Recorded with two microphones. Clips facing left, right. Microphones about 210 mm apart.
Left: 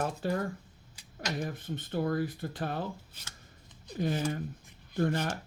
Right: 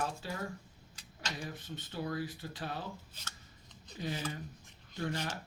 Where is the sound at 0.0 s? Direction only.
55° left (ahead or behind).